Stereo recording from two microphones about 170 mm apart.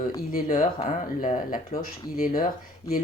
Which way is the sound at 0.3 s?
45° left (ahead or behind).